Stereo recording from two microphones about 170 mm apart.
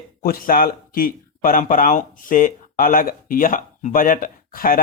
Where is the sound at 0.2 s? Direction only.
60° left (ahead or behind).